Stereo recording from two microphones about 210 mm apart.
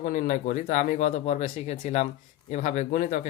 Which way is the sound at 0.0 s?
40° left (ahead or behind).